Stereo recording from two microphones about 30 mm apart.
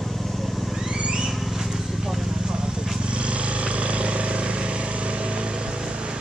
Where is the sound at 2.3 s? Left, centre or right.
Right.